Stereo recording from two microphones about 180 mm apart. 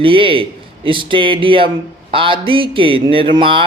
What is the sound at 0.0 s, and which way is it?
A man's voice, 30° right (ahead or behind).